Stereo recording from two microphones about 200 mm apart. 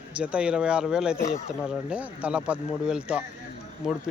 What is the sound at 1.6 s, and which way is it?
Speech, 5° right (ahead or behind).